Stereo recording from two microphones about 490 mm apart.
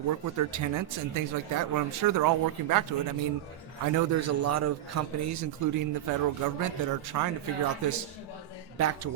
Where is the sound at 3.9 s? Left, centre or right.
Right.